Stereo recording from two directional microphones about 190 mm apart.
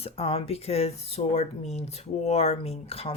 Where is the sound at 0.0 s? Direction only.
30° left (ahead or behind).